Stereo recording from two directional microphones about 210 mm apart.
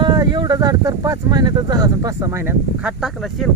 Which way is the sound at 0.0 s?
20° right (ahead or behind).